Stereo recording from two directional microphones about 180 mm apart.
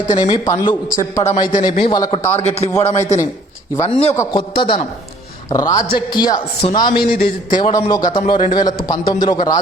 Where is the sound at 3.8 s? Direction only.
25° left (ahead or behind).